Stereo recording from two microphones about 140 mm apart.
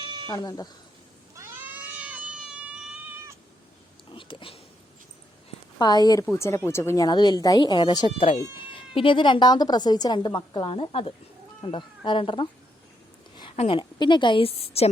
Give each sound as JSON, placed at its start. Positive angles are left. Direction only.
{"t": 0.0, "sound": "a sound", "side_deg": -35}
{"t": 0.3, "sound": "a woman's voice", "side_deg": 25}
{"t": 1.4, "sound": "cat", "side_deg": -15}
{"t": 4.1, "sound": "a sound", "side_deg": 35}
{"t": 5.8, "sound": "a woman's voice", "side_deg": 30}
{"t": 13.6, "sound": "a woman's voice", "side_deg": 40}